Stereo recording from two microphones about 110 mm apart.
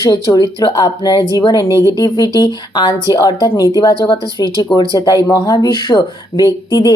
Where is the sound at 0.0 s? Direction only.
35° left (ahead or behind).